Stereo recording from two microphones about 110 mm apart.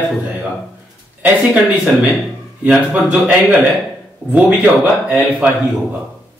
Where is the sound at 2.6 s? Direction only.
5° right (ahead or behind).